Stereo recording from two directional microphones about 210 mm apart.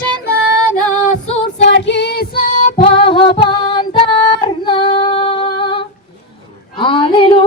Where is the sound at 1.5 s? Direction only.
55° left (ahead or behind).